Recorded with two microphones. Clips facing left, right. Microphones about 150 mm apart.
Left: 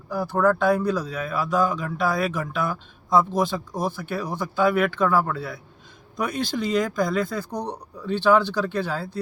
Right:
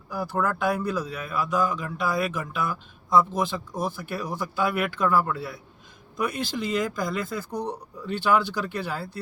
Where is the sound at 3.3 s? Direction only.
35° left (ahead or behind).